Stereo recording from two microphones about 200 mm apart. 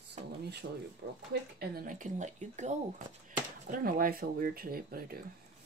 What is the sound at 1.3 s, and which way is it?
Speech, 50° right (ahead or behind).